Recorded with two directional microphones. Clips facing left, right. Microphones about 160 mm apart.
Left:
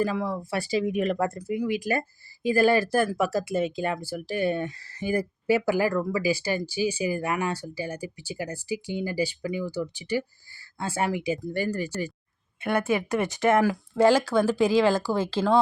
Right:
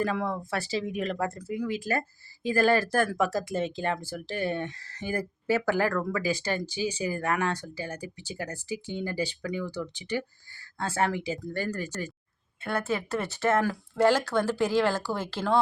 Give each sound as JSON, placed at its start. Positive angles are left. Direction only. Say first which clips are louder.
{"t": 0.0, "sound": "speech", "louder": "left 2 dB", "side_deg": 5}
{"t": 0.9, "sound": "speech", "louder": "left 5 dB", "side_deg": 50}
{"t": 1.5, "sound": "speech", "louder": "left 3 dB", "side_deg": 15}